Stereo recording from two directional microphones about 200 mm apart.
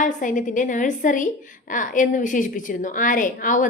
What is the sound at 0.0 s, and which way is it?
A woman's voice, 40° left (ahead or behind).